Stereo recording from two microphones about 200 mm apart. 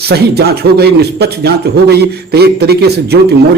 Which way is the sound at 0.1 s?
55° right (ahead or behind).